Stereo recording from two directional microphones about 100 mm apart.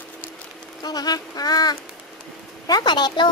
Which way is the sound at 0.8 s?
40° left (ahead or behind).